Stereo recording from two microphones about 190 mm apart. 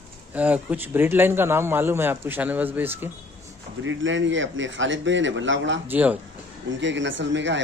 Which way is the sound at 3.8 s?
80° right.